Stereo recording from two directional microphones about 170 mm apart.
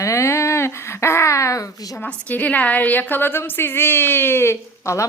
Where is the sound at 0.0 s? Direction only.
15° left (ahead or behind).